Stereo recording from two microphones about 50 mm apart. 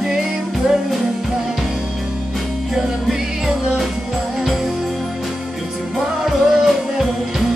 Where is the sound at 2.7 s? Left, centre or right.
Centre.